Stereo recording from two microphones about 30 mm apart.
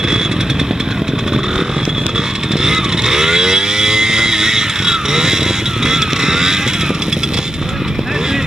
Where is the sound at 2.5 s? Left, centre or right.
Centre.